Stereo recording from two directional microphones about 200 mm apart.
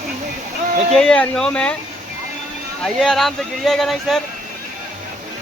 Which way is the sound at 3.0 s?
Centre (ahead or behind).